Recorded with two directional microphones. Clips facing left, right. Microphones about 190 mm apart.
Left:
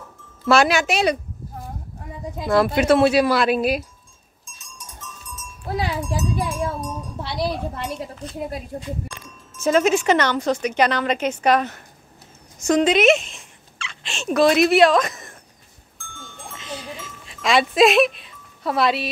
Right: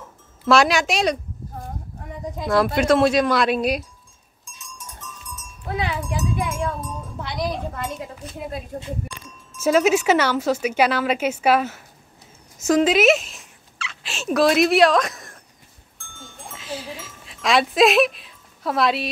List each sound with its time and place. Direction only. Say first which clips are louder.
0.5 s speech: even; centre (ahead or behind)
2.4 s speech: left 1 dB; centre (ahead or behind)
5.7 s a woman's voice: left 1 dB; 35° left (ahead or behind)
7.2 s a woman's voice: left 1 dB; 30° left (ahead or behind)
9.6 s speech: even; 5° right (ahead or behind)
16.5 s a sound: right 1 dB; 5° right (ahead or behind)